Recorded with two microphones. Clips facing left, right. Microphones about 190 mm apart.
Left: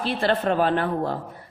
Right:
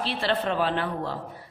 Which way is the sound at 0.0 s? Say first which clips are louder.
Left 4 dB; 50° left (ahead or behind).